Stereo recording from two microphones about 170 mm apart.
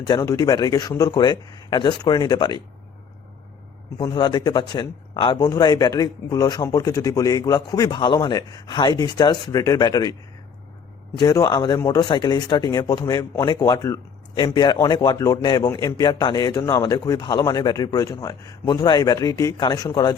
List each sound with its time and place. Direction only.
0.0 s speech: 20° left (ahead or behind)
3.9 s speech: 25° left (ahead or behind)
11.2 s speech: 20° left (ahead or behind)